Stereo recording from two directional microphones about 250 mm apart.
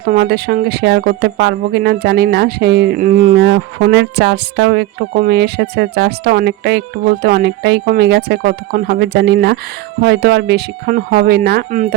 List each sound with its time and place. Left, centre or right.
0.0 s speech: right